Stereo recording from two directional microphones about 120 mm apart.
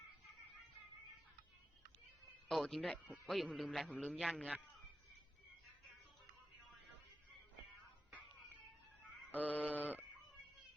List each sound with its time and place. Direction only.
2.5 s a man's voice: centre (ahead or behind)
9.3 s bleat: 15° left (ahead or behind)